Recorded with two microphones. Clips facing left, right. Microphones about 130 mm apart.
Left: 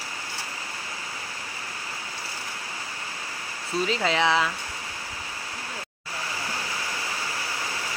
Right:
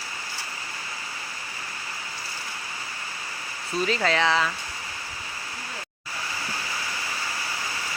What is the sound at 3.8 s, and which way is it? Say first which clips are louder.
Speech: right 1 dB; 20° left (ahead or behind).